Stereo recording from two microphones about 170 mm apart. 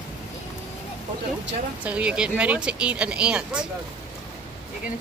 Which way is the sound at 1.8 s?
10° right (ahead or behind).